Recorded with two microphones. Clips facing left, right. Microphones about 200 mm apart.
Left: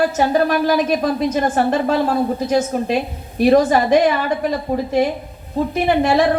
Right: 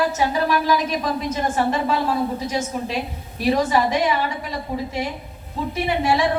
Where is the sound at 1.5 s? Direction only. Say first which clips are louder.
Left 4 dB; 50° left (ahead or behind).